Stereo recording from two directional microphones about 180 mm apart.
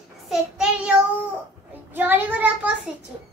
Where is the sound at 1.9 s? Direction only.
10° right (ahead or behind).